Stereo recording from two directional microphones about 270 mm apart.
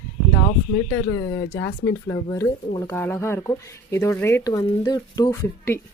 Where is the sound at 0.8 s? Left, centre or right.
Left.